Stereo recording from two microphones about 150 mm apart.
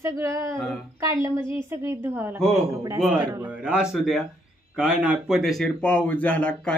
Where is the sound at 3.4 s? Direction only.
5° right (ahead or behind).